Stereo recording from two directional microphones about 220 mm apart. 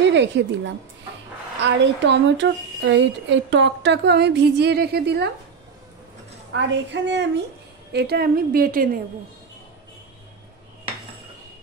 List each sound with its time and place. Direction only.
0.1 s speech: 55° right (ahead or behind)
6.5 s speech: 55° right (ahead or behind)